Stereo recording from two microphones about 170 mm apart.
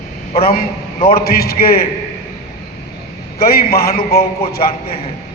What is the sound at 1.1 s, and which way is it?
Speech, 65° left (ahead or behind).